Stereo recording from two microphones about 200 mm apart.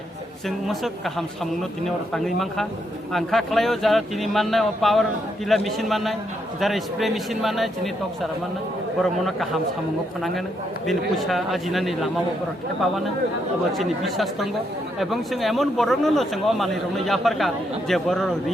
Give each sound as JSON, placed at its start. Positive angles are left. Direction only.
{"t": 0.4, "sound": "speech", "side_deg": 0}
{"t": 9.2, "sound": "speech", "side_deg": 0}
{"t": 13.7, "sound": "speech", "side_deg": 0}